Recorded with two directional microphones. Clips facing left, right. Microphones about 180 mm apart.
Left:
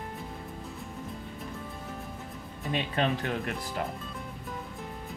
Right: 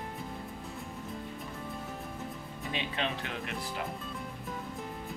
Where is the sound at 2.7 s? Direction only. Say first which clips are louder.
Left 6 dB; 45° left (ahead or behind).